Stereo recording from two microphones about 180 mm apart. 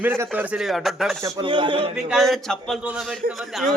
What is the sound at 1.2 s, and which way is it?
Speech, 25° right (ahead or behind).